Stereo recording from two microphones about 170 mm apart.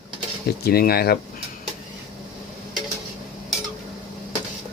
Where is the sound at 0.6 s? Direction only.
65° left (ahead or behind).